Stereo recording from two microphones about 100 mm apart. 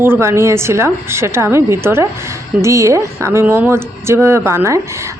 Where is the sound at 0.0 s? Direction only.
25° right (ahead or behind).